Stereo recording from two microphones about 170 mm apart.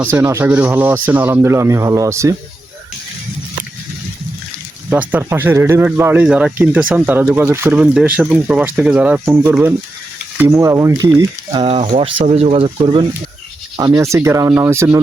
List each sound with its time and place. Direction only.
0.0 s speech: 15° right (ahead or behind)
4.9 s speech: 10° right (ahead or behind)
11.6 s speech: 30° right (ahead or behind); by 15.0 s 15° right (ahead or behind)